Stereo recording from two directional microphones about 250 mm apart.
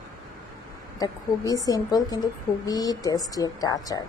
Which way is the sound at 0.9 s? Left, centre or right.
Centre.